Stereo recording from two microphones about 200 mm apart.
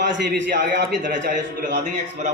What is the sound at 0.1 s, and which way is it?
A man's voice, 60° right (ahead or behind).